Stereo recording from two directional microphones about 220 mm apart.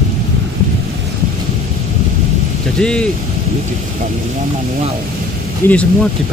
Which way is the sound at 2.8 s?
5° left (ahead or behind).